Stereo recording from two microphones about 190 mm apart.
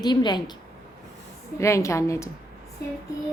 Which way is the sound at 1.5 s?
15° left (ahead or behind).